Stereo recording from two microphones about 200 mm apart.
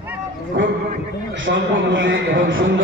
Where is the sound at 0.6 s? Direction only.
60° right (ahead or behind).